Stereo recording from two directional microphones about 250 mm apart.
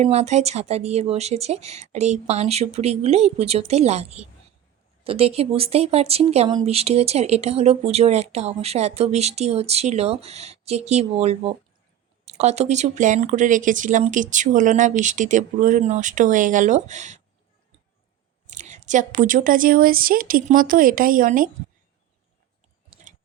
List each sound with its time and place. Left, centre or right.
0.0 s speech: right
18.5 s speech: right